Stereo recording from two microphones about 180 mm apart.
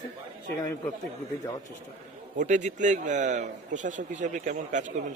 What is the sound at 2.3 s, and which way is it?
A man's voice, 45° right (ahead or behind).